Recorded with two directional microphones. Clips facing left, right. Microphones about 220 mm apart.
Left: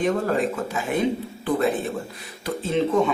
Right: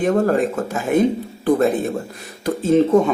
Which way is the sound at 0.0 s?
50° right (ahead or behind).